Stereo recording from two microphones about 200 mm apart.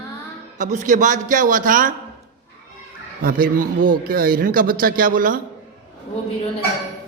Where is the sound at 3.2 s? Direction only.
45° right (ahead or behind).